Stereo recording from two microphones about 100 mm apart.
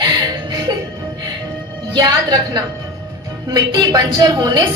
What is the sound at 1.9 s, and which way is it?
A woman's voice, 45° right (ahead or behind).